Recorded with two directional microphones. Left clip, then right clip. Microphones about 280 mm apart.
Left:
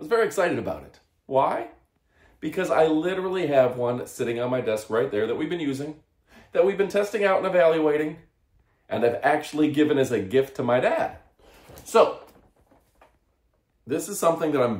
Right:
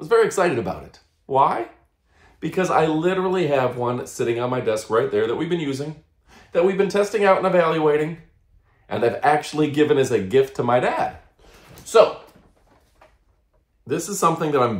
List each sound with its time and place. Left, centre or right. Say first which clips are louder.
0.0 s speech: right 5 dB; centre
13.8 s speech: right 3 dB; centre